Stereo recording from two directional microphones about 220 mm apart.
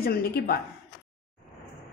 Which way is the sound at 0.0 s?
45° left (ahead or behind).